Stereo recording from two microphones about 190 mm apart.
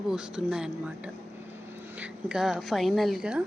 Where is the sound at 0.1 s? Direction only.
5° right (ahead or behind).